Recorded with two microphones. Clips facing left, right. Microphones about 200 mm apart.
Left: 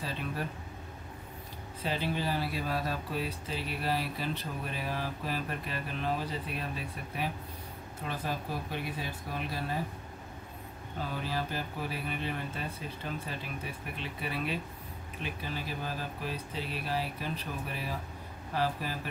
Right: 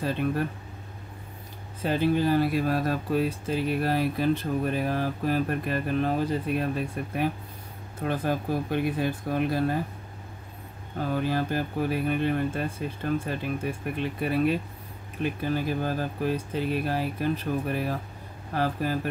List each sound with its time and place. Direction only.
0.0 s speech: 50° right (ahead or behind)
1.8 s speech: 50° right (ahead or behind)
11.0 s speech: 50° right (ahead or behind)